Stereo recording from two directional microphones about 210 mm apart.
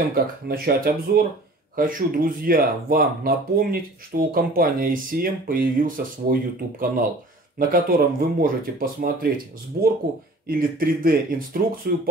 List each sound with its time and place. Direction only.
0.1 s speech: 45° right (ahead or behind)